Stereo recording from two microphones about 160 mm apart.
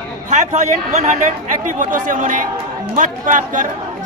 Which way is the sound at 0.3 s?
45° right (ahead or behind).